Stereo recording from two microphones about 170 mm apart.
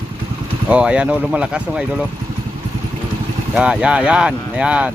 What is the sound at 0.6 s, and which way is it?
Speech, 5° right (ahead or behind).